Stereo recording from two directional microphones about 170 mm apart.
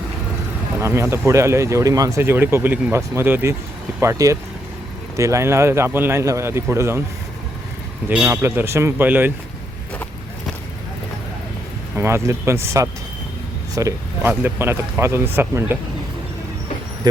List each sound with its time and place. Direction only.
0.8 s speech: 15° right (ahead or behind)
8.1 s speech: 10° right (ahead or behind)
9.9 s vehicle: 10° left (ahead or behind)
11.9 s speech: 15° right (ahead or behind)